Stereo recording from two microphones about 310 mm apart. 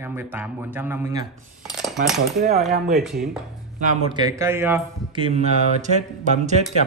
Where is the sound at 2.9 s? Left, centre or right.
Centre.